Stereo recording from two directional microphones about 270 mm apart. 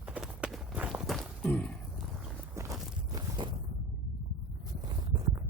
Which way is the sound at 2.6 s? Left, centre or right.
Centre.